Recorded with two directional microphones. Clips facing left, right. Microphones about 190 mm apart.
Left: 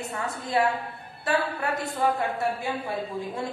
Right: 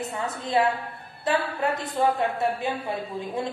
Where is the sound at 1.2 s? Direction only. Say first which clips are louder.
Right 2 dB; 20° right (ahead or behind).